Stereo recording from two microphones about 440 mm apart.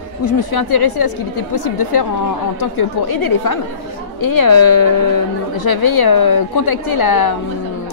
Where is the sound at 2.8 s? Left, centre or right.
Left.